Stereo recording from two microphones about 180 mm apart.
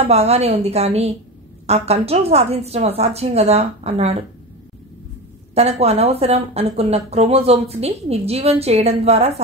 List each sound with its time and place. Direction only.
0.0 s speech: 35° right (ahead or behind)
5.5 s speech: 35° right (ahead or behind)